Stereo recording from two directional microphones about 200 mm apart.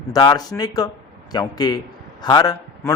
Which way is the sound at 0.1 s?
20° left (ahead or behind).